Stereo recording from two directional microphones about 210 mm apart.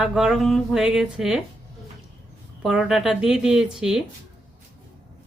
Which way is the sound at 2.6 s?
Centre (ahead or behind).